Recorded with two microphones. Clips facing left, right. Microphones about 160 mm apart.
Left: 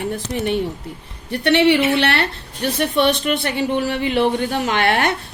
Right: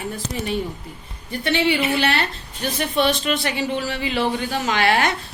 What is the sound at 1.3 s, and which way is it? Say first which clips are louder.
A woman's voice: left 6 dB; 70° left (ahead or behind).